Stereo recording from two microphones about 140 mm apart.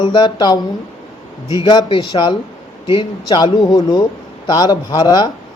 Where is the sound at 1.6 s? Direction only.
35° left (ahead or behind).